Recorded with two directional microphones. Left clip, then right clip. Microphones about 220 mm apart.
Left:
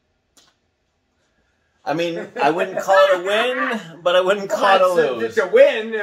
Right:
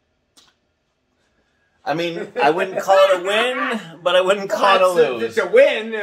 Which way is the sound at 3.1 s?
15° left (ahead or behind).